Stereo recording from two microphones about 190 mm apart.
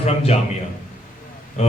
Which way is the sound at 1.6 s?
35° left (ahead or behind).